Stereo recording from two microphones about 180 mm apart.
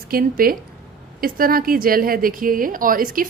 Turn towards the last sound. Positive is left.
turn(degrees=-50)  # may be behind; listen again after turning